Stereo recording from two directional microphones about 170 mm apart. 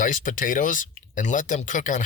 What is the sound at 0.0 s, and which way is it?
Speech, 50° left (ahead or behind).